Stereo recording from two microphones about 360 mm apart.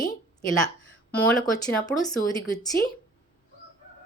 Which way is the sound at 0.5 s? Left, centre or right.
Centre.